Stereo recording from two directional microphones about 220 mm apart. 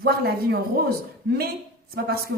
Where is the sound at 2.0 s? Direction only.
45° right (ahead or behind).